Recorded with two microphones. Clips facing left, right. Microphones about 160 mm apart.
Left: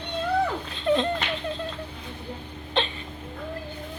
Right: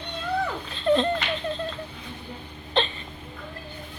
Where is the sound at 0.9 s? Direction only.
5° left (ahead or behind).